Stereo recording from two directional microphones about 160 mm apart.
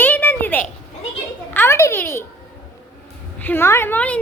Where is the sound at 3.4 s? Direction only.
15° left (ahead or behind).